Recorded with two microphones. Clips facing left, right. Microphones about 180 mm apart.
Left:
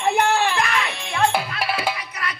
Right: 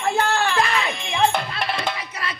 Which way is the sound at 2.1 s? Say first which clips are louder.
Even; 30° right (ahead or behind).